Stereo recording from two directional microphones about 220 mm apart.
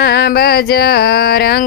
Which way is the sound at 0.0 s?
45° left (ahead or behind).